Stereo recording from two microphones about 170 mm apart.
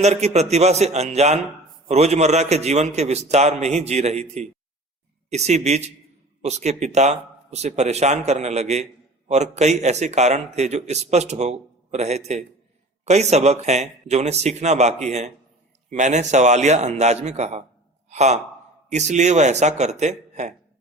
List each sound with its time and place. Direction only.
0.0 s a man's voice: 40° right (ahead or behind)